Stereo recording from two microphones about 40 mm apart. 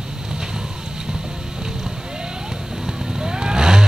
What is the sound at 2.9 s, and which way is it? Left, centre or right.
Vehicle, centre.